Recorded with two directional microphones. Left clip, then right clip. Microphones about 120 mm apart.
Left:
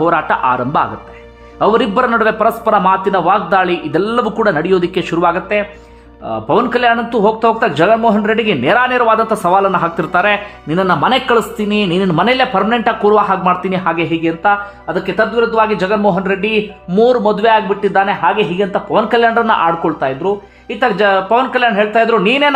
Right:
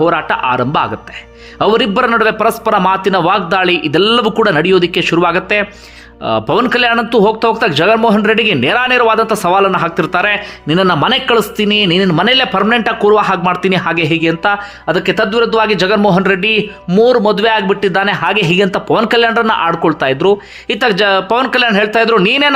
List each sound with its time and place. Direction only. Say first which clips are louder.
0.0 s a man's voice: even; centre (ahead or behind); by 3.4 s 30° right (ahead or behind)
3.5 s a man's voice: right 1 dB; 10° right (ahead or behind)
4.8 s a man's voice: right 3 dB; 10° right (ahead or behind); by 6.7 s 30° right (ahead or behind)
6.7 s a man's voice: right 1 dB; 15° right (ahead or behind); by 16.6 s 35° right (ahead or behind)
16.9 s speech: right 2 dB; 15° right (ahead or behind); by 18.2 s 35° right (ahead or behind)
18.2 s speech: right 2 dB; 50° right (ahead or behind); by 19.3 s 25° right (ahead or behind)
19.3 s a man's voice: even; 10° right (ahead or behind)
19.8 s speech: right 4 dB; 30° right (ahead or behind)